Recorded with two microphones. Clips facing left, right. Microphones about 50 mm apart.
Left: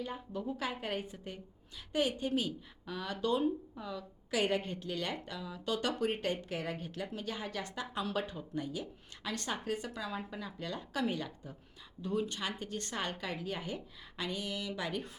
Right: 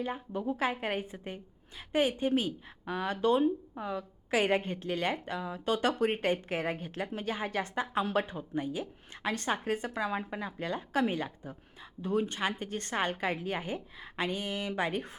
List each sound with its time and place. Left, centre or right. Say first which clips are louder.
0.0 s a woman's voice: right 5 dB; right